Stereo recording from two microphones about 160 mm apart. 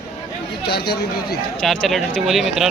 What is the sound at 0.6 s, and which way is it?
Speech, 90° left.